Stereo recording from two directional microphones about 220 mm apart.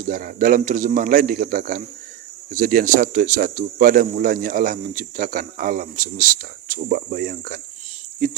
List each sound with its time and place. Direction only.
0.1 s speech: 40° right (ahead or behind)